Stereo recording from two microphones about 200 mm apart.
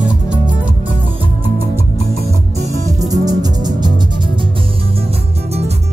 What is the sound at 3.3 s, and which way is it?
Music, 20° right (ahead or behind).